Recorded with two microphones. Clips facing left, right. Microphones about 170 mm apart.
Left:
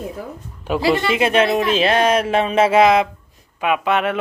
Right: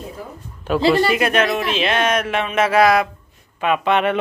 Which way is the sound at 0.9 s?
25° left (ahead or behind).